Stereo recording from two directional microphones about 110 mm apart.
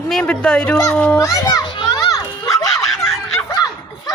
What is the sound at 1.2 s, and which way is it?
Speech, 30° left (ahead or behind).